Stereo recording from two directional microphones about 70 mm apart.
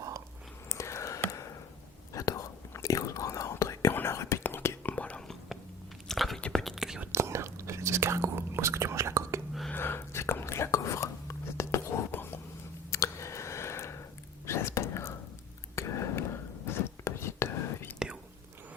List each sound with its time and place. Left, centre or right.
0.7 s a sound: left
2.1 s whispering: left
3.9 s whispering: left
4.9 s whispering: left
6.1 s biting: centre
6.4 s whispering: centre
7.1 s whispering: right
9.7 s whispering: left
12.1 s whispering: left
12.9 s clicking: left
14.4 s whispering: left